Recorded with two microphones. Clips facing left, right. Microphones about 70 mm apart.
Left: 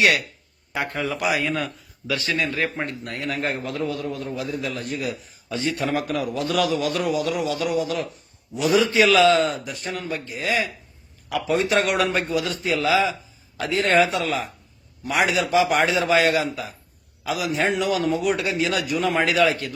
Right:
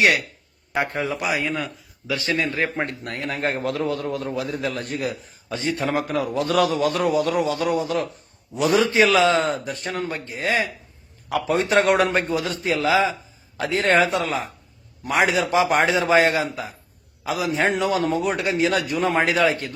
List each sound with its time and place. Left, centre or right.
0.7 s a man's voice: right
1.5 s a man's voice: centre
2.0 s a man's voice: right
2.7 s a man's voice: right
3.2 s a man's voice: right
3.6 s a man's voice: right
5.5 s a man's voice: right
6.5 s a man's voice: right
8.9 s a man's voice: right
9.4 s a man's voice: right
9.7 s a man's voice: right
13.6 s a man's voice: right